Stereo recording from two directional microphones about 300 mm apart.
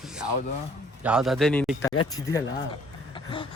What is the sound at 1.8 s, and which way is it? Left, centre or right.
Speech, left.